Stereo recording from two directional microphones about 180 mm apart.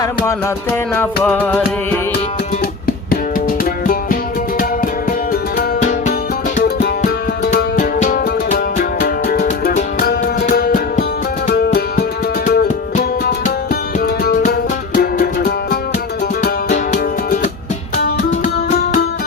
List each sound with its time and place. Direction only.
0.0 s music: 15° left (ahead or behind)
3.6 s music: 50° left (ahead or behind)
6.8 s music: 60° left (ahead or behind)
7.5 s music: 40° left (ahead or behind)